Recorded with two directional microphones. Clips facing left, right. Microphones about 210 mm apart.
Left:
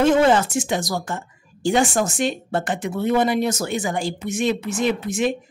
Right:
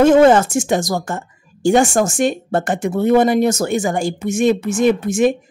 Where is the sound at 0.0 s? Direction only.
45° right (ahead or behind).